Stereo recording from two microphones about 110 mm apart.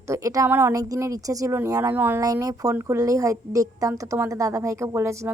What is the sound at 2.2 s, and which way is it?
A woman's voice, 35° right (ahead or behind).